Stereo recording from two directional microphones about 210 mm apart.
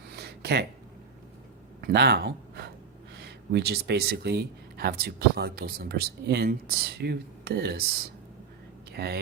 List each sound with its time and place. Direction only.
0.1 s a sound: 50° right (ahead or behind)
1.8 s speech: 50° right (ahead or behind)
8.9 s speech: 50° right (ahead or behind)